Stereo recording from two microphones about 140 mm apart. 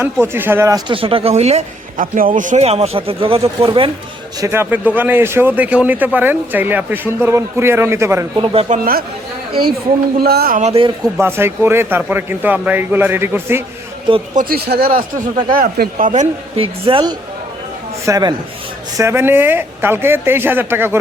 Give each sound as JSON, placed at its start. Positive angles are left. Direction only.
{"t": 0.0, "sound": "a man's voice", "side_deg": -15}
{"t": 0.9, "sound": "speech", "side_deg": -40}
{"t": 2.0, "sound": "speech", "side_deg": -75}
{"t": 4.4, "sound": "a man's voice", "side_deg": -20}
{"t": 8.7, "sound": "speech", "side_deg": -85}
{"t": 10.2, "sound": "speech", "side_deg": -90}
{"t": 10.6, "sound": "speech", "side_deg": -50}
{"t": 11.2, "sound": "a man's voice", "side_deg": -15}
{"t": 14.3, "sound": "speech", "side_deg": -90}
{"t": 16.6, "sound": "a man's voice", "side_deg": -40}